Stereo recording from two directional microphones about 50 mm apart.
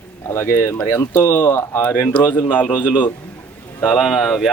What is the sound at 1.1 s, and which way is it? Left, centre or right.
Speech, left.